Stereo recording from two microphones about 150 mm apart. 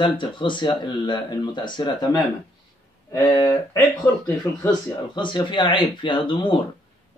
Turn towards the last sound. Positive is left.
turn(degrees=35)  # may be behind; listen again after turning